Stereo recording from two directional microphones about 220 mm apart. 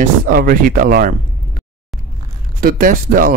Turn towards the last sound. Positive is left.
turn(degrees=-40)  # may be behind; listen again after turning